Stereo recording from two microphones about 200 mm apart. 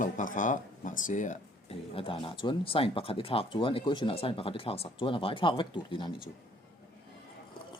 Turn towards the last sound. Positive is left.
turn(degrees=25)  # may be behind; listen again after turning